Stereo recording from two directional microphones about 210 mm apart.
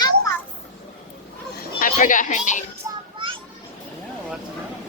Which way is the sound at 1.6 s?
40° left (ahead or behind).